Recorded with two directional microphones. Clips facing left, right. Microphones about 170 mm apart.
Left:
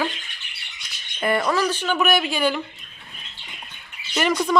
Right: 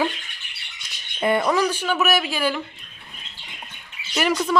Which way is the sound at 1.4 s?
10° right (ahead or behind).